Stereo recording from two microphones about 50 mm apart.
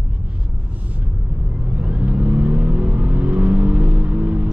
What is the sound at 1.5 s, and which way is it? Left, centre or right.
Vehicle, right.